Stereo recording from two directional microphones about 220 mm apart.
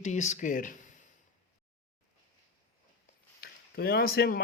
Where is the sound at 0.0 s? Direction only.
30° left (ahead or behind).